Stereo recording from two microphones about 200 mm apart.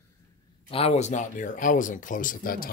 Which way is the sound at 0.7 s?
30° left (ahead or behind).